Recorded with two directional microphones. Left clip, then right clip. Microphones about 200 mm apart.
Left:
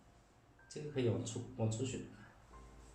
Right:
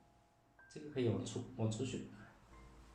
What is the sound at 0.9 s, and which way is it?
Speech, 25° right (ahead or behind).